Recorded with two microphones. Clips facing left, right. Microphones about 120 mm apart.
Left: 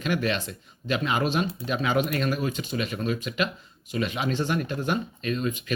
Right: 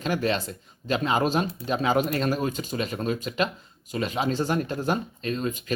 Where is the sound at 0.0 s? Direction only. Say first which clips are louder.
Right 1 dB; 35° right (ahead or behind).